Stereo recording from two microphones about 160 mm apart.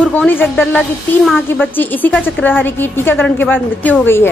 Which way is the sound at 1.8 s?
10° left (ahead or behind).